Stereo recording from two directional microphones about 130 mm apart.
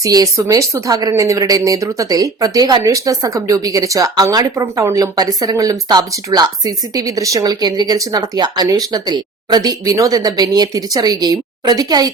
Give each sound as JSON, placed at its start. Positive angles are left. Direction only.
{"t": 0.0, "sound": "speech", "side_deg": -25}